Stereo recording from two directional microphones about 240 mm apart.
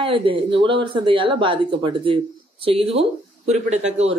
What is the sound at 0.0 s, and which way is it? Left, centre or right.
Speech, right.